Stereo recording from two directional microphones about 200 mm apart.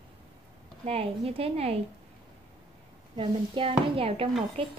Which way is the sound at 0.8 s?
30° right (ahead or behind).